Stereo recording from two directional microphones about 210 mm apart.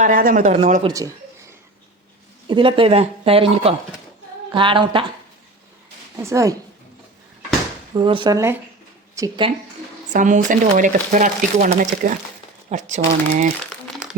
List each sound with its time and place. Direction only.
0.0 s speech: 40° right (ahead or behind)
0.9 s a woman's voice: 15° right (ahead or behind)
2.5 s speech: 25° right (ahead or behind)
6.2 s a woman's voice: 15° right (ahead or behind)
7.9 s speech: 25° right (ahead or behind)
10.1 s speech: 35° right (ahead or behind)
13.8 s crumpling: centre (ahead or behind)